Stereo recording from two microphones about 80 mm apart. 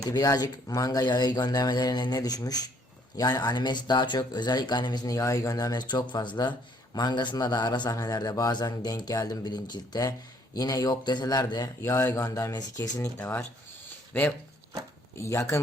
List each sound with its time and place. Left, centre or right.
0.0 s speech: left
5.1 s a man's voice: left
7.9 s speech: left
11.8 s speech: left
13.0 s speech: left
15.1 s speech: left